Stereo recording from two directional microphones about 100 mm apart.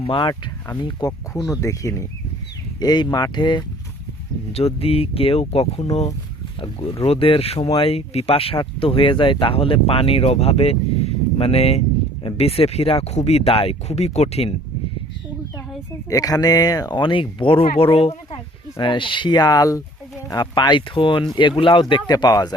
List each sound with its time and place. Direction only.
0.0 s speech: 55° left (ahead or behind)
1.4 s speech: 30° left (ahead or behind)
2.8 s speech: 45° left (ahead or behind)
4.5 s speech: 80° left
12.2 s speech: 80° left
15.9 s speech: 35° left (ahead or behind)
17.0 s speech: 60° left (ahead or behind)
18.8 s speech: 55° left (ahead or behind)
22.1 s speech: 40° left (ahead or behind)